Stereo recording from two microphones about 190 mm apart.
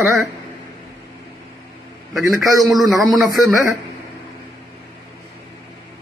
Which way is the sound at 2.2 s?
20° right (ahead or behind).